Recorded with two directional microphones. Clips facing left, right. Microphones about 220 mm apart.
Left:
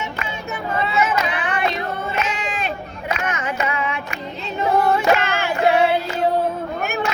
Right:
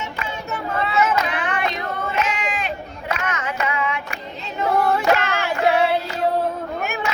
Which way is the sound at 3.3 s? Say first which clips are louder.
Left 1 dB; 15° left (ahead or behind).